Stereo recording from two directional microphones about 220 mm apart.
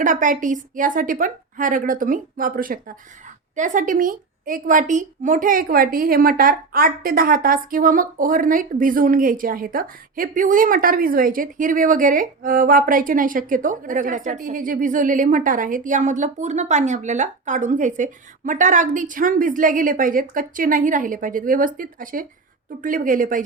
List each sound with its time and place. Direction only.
0.0 s a woman's voice: 35° right (ahead or behind)